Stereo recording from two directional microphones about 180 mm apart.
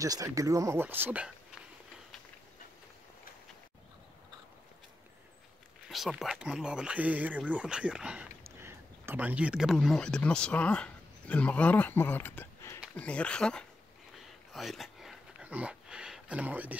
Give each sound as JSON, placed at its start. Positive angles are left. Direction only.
{"t": 0.0, "sound": "speech", "side_deg": -20}
{"t": 5.9, "sound": "speech", "side_deg": 0}
{"t": 14.5, "sound": "a sound", "side_deg": 0}